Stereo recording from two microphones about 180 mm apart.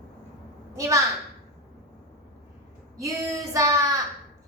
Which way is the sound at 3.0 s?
20° right (ahead or behind).